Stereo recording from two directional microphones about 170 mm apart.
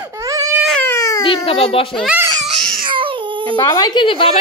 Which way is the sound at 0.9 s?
20° left (ahead or behind).